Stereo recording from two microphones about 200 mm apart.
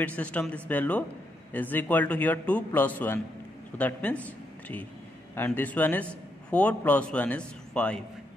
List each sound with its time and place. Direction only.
0.0 s a man's voice: 5° left (ahead or behind)